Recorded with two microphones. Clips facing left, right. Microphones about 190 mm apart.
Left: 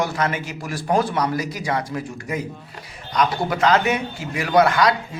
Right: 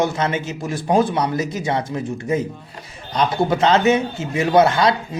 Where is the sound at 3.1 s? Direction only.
25° right (ahead or behind).